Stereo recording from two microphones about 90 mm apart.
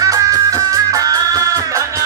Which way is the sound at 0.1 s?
40° right (ahead or behind).